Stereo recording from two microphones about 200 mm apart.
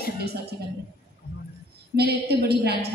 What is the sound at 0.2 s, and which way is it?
Speech, 55° right (ahead or behind).